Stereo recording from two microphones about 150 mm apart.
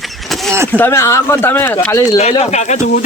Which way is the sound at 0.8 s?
20° left (ahead or behind).